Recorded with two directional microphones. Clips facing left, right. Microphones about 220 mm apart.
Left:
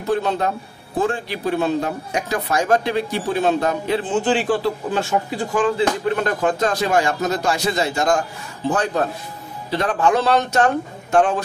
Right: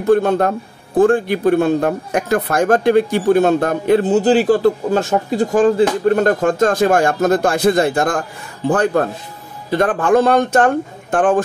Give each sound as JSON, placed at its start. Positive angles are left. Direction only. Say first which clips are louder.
{"t": 0.0, "sound": "speech", "louder": "right 7 dB", "side_deg": -50}